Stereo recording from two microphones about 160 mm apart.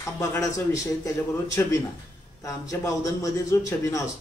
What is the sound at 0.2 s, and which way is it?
A man's voice, 20° left (ahead or behind).